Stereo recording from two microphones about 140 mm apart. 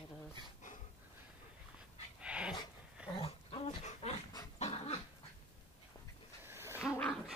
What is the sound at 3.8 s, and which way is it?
Dog, 50° left (ahead or behind).